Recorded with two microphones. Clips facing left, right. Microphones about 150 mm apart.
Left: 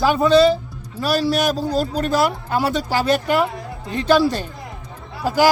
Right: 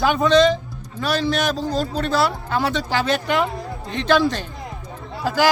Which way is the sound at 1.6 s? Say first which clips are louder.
Left 2 dB; 40° left (ahead or behind).